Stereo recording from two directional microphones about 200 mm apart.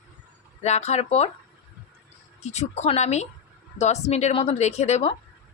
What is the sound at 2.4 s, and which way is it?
A woman's voice, 35° left (ahead or behind).